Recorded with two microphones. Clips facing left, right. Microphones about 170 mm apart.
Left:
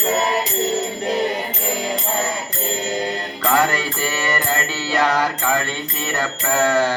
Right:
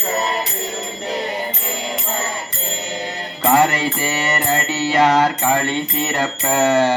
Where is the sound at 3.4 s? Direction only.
25° right (ahead or behind).